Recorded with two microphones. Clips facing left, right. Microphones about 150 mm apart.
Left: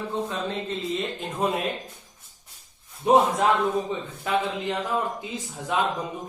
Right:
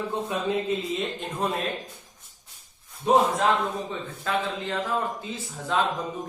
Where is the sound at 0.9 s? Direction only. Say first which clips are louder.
Left 1 dB; centre (ahead or behind).